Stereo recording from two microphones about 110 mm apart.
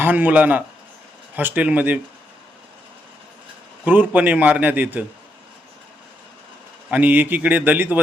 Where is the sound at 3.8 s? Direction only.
15° right (ahead or behind).